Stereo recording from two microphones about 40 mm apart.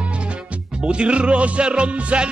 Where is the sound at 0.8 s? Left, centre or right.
Right.